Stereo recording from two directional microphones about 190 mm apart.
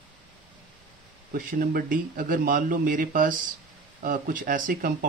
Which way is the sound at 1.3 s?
50° right (ahead or behind).